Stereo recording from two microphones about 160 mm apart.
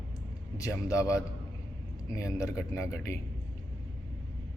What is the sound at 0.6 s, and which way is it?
Speech, 20° left (ahead or behind).